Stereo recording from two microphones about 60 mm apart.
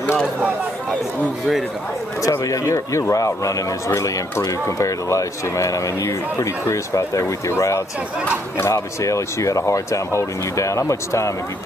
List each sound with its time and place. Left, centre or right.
2.4 s speech: left